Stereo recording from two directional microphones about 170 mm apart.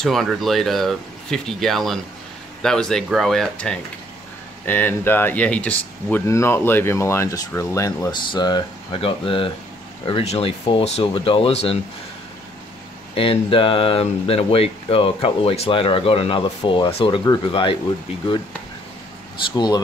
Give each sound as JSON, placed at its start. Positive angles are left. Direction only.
{"t": 0.0, "sound": "speech", "side_deg": 0}
{"t": 13.1, "sound": "speech", "side_deg": 35}
{"t": 19.5, "sound": "speech", "side_deg": 25}